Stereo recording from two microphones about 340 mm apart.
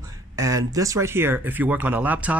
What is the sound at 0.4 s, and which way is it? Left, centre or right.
Speech, centre.